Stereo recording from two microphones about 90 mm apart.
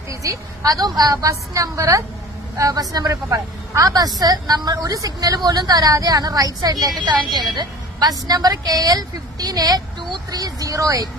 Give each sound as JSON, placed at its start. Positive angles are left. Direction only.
{"t": 0.1, "sound": "a woman's voice", "side_deg": -40}